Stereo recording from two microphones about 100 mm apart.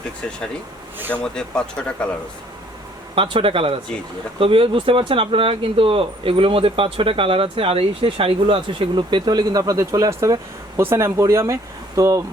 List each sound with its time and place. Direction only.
1.1 s speech: 10° left (ahead or behind)
3.2 s speech: 65° right (ahead or behind); by 12.2 s 35° right (ahead or behind)